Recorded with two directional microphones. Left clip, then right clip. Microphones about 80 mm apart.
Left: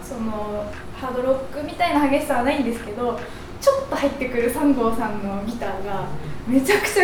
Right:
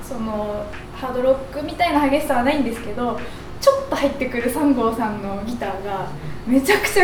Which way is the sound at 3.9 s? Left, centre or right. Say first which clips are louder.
Right 1 dB; centre.